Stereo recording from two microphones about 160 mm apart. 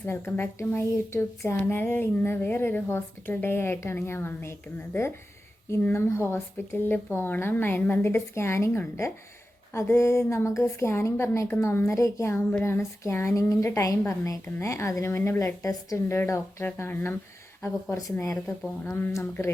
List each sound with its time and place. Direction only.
0.0 s a woman's voice: 15° left (ahead or behind)
5.7 s a woman's voice: 15° left (ahead or behind)